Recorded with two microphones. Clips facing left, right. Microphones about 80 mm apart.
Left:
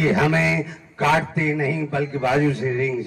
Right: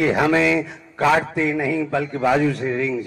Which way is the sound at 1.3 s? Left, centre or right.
Right.